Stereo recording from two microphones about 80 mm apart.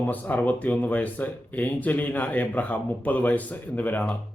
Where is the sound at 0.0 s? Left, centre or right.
Left.